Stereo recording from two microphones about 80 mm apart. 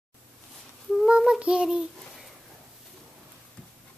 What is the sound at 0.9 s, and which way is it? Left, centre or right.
Child singing, centre.